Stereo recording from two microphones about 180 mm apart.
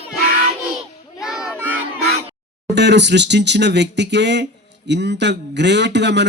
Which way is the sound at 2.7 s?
70° right (ahead or behind).